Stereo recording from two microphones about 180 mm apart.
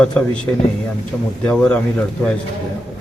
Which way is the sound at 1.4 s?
5° left (ahead or behind).